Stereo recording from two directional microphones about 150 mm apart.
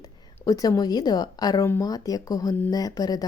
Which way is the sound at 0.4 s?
25° left (ahead or behind).